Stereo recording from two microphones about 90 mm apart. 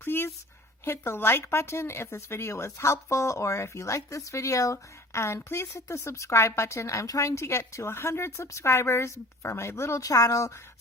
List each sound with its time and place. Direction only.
0.0 s speech: 25° left (ahead or behind)
10.0 s speech: 40° left (ahead or behind)